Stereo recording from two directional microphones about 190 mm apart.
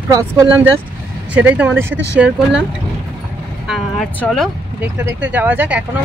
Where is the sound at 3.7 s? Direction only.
5° left (ahead or behind).